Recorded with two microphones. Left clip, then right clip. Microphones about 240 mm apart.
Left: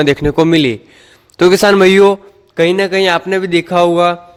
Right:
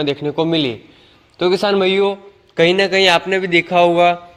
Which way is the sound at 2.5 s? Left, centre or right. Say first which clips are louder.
Left 1 dB; left.